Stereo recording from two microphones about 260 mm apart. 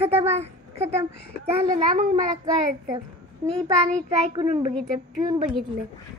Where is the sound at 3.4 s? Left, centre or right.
Centre.